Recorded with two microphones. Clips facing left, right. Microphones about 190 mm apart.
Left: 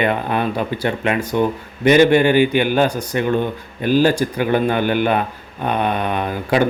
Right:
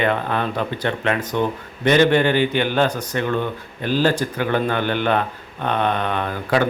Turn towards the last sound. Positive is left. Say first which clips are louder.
# left 2 dB
turn(degrees=15)  # may be behind; listen again after turning